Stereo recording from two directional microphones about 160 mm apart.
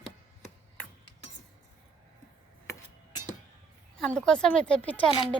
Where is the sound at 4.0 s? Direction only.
5° left (ahead or behind).